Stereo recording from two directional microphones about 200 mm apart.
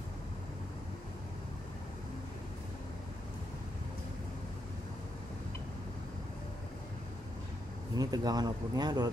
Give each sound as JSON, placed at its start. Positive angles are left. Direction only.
{"t": 7.9, "sound": "speech", "side_deg": -20}